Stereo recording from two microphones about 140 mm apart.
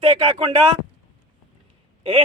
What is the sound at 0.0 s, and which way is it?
Speech, 45° right (ahead or behind).